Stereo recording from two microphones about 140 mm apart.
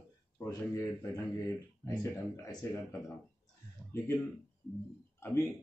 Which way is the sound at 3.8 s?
10° left (ahead or behind).